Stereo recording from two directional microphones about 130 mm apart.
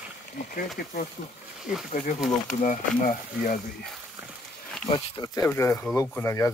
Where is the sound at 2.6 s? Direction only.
85° left.